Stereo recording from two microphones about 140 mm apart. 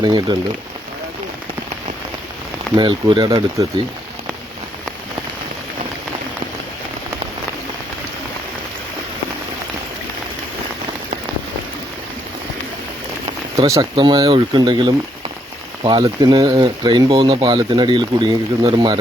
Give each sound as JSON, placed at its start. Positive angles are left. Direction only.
{"t": 0.0, "sound": "speech", "side_deg": -30}
{"t": 2.7, "sound": "speech", "side_deg": -35}
{"t": 13.6, "sound": "speech", "side_deg": -30}